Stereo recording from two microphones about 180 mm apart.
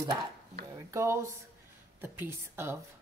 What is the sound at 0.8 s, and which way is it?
A woman's voice, 15° right (ahead or behind).